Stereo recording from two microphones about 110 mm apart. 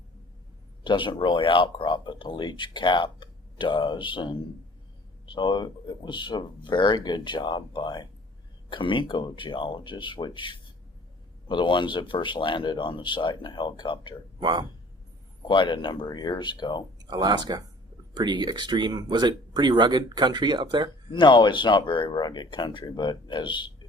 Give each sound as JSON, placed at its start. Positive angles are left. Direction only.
{"t": 0.9, "sound": "speech", "side_deg": 45}
{"t": 14.3, "sound": "speech", "side_deg": -45}
{"t": 15.4, "sound": "speech", "side_deg": 45}
{"t": 17.0, "sound": "speech", "side_deg": -40}
{"t": 21.1, "sound": "speech", "side_deg": 45}